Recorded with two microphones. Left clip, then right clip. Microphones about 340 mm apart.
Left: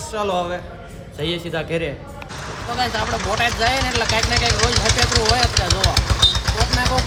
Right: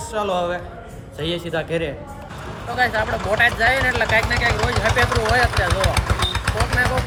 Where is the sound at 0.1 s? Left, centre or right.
Centre.